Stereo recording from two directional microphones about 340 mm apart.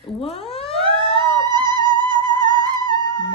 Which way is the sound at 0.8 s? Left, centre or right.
Centre.